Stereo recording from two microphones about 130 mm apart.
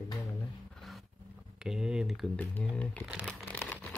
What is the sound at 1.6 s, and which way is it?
Speech, 5° right (ahead or behind).